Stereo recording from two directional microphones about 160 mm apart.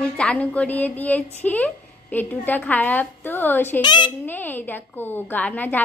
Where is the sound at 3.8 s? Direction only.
30° left (ahead or behind).